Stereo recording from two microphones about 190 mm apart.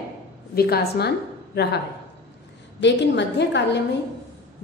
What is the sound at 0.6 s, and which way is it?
A woman's voice, 55° left (ahead or behind).